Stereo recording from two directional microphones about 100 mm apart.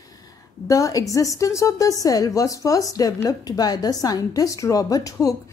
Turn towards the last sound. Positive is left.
turn(degrees=35)  # may be behind; listen again after turning